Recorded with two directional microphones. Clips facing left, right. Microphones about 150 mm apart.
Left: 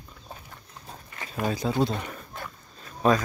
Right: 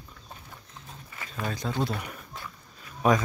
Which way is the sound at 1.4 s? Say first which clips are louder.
Left 5 dB; 5° left (ahead or behind).